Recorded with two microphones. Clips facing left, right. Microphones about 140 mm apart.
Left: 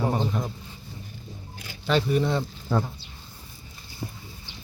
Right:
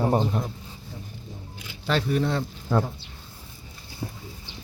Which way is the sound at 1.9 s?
Centre (ahead or behind).